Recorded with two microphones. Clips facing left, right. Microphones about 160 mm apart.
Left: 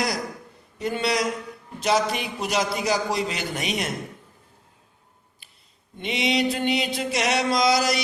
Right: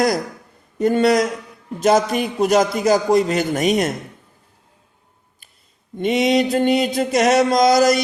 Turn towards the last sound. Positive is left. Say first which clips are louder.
# right 7 dB
turn(degrees=-45)  # may be behind; listen again after turning